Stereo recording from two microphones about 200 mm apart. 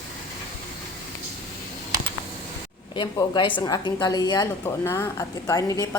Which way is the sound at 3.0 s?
25° left (ahead or behind).